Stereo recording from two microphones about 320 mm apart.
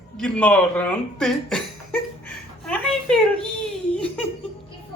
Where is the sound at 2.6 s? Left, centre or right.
Centre.